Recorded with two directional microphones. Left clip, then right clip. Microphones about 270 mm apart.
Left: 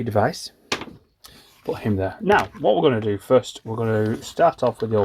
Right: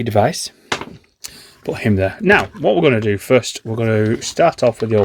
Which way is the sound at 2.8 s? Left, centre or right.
Right.